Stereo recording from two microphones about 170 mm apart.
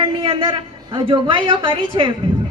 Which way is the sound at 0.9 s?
30° right (ahead or behind).